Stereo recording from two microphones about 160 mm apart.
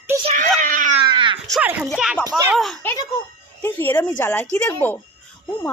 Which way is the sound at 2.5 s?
Centre (ahead or behind).